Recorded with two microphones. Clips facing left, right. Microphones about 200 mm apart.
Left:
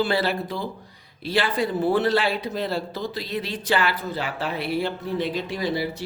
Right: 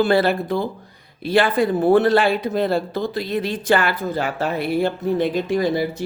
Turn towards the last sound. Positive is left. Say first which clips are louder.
# right 6 dB
turn(degrees=-50)  # may be behind; listen again after turning